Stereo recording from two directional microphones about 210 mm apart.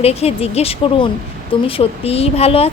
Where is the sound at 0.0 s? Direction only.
30° left (ahead or behind).